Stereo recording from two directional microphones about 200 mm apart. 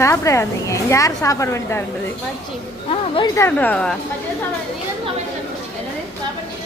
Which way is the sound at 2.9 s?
25° left (ahead or behind).